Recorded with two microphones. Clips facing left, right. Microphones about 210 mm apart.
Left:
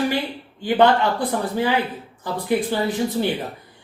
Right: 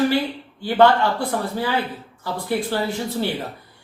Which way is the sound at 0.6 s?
15° left (ahead or behind).